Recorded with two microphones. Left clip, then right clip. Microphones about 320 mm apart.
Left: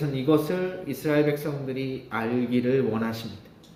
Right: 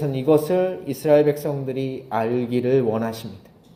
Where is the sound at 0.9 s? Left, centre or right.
Centre.